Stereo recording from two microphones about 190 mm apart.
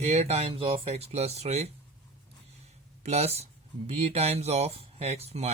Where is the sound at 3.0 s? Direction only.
35° right (ahead or behind).